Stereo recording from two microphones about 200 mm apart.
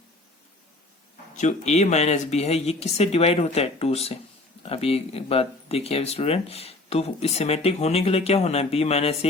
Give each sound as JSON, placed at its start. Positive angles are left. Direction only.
{"t": 1.4, "sound": "speech", "side_deg": 35}